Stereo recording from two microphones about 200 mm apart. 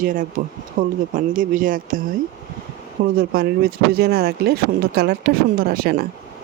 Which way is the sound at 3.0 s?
50° right (ahead or behind).